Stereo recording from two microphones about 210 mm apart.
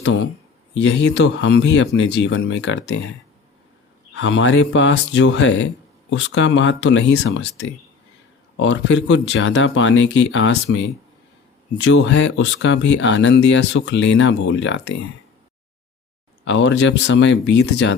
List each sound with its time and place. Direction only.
0.8 s speech: 60° left (ahead or behind)
4.1 s speech: 60° left (ahead or behind)
8.5 s speech: 60° left (ahead or behind)
16.4 s speech: 60° left (ahead or behind)